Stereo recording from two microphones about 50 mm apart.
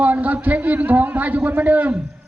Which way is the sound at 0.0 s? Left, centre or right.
Right.